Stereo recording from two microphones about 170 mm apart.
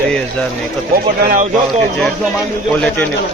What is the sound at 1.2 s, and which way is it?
Speech, 55° right (ahead or behind).